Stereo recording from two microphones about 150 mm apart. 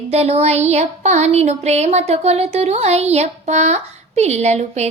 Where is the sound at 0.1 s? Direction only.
45° right (ahead or behind).